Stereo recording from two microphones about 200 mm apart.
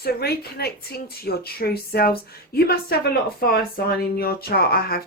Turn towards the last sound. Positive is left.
turn(degrees=50)  # may be behind; listen again after turning